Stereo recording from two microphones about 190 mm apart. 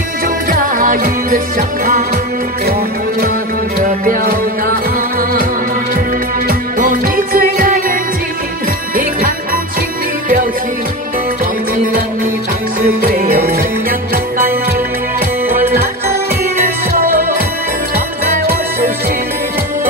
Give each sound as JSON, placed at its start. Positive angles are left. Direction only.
{"t": 0.5, "sound": "music", "side_deg": -45}
{"t": 3.8, "sound": "music", "side_deg": -50}
{"t": 6.4, "sound": "music", "side_deg": -45}
{"t": 12.8, "sound": "music", "side_deg": -50}
{"t": 15.4, "sound": "music", "side_deg": -10}